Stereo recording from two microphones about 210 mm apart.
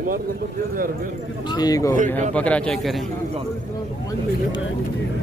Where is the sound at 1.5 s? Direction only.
20° left (ahead or behind); by 3.0 s centre (ahead or behind).